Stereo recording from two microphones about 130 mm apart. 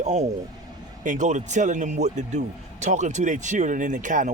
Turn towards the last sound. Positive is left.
turn(degrees=-75)  # may be behind; listen again after turning